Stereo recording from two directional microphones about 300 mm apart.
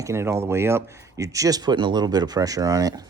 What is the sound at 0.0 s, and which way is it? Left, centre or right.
Speech, centre.